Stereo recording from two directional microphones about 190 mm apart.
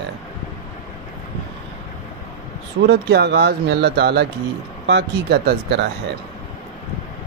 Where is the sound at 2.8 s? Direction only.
60° right (ahead or behind).